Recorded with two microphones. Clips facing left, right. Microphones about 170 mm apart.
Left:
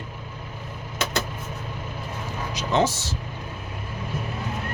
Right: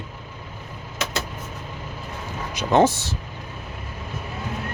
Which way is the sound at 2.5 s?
55° right (ahead or behind).